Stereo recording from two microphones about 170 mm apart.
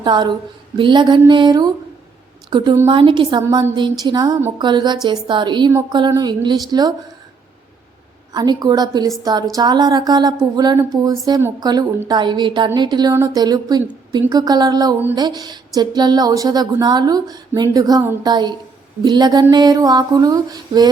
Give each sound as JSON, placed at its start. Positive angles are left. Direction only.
{"t": 0.0, "sound": "a woman's voice", "side_deg": -25}
{"t": 8.3, "sound": "speech", "side_deg": -25}